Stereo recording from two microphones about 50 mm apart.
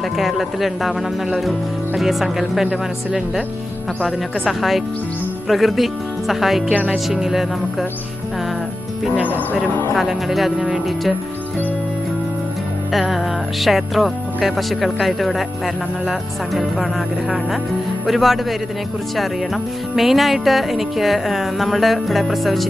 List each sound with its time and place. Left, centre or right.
0.2 s speech: centre
4.0 s speech: centre
6.7 s music: right
7.1 s speech: centre
9.9 s speech: centre
12.9 s speech: centre